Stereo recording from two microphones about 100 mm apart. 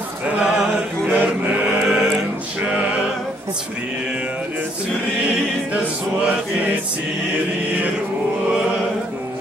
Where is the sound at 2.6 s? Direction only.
15° right (ahead or behind).